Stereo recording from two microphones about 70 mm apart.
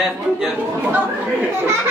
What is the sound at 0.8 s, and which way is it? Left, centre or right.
Speech, right.